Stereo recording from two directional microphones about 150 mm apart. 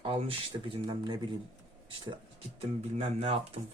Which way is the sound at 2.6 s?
45° right (ahead or behind).